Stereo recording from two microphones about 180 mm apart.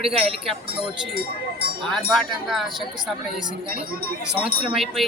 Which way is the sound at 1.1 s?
60° right (ahead or behind).